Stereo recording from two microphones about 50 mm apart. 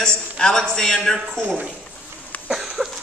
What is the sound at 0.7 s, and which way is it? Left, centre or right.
Speech, centre.